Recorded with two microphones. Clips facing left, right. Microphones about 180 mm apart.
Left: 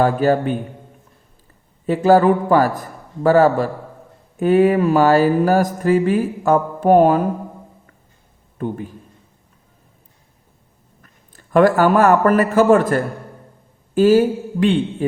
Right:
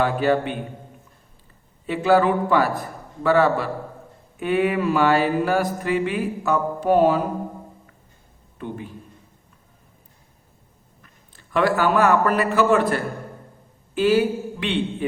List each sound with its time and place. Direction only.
0.0 s mantra: 40° left (ahead or behind)
1.9 s a man's voice: 40° left (ahead or behind)
3.2 s mantra: 40° left (ahead or behind)
8.5 s a man's voice: 45° left (ahead or behind)
11.0 s a man's voice: 45° left (ahead or behind)